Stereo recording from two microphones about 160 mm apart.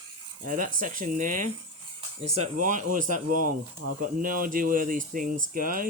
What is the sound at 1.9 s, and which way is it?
Speech, 40° right (ahead or behind).